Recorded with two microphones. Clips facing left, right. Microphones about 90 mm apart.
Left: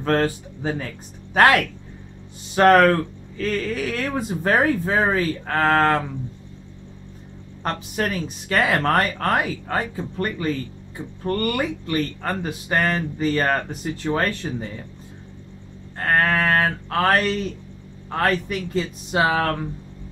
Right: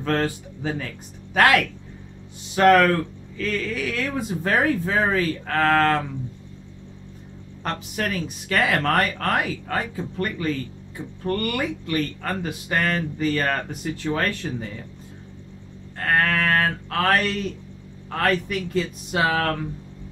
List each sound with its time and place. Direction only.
0.0 s speech: 35° left (ahead or behind)
7.6 s speech: 30° left (ahead or behind)
16.0 s speech: 30° left (ahead or behind)